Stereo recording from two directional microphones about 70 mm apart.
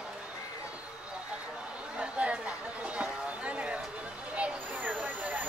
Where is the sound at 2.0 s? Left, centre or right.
Centre.